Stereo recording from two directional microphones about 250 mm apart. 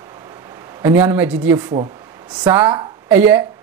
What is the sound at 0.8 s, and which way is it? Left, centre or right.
Speech, centre.